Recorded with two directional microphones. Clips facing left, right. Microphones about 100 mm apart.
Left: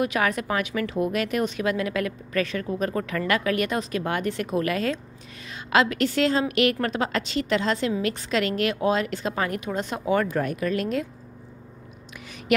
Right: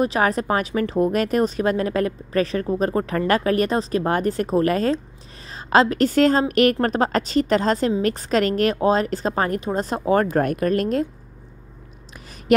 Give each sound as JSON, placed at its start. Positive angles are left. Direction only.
{"t": 0.0, "sound": "a woman's voice", "side_deg": -35}